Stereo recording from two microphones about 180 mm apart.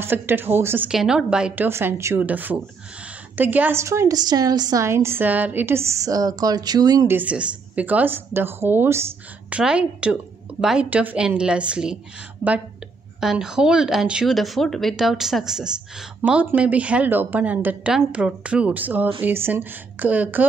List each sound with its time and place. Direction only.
0.0 s a woman's voice: 10° right (ahead or behind)
7.2 s a woman's voice: 5° right (ahead or behind)
13.2 s a woman's voice: 5° right (ahead or behind)